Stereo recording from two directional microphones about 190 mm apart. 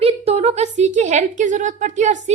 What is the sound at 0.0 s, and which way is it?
A woman's voice, 30° right (ahead or behind).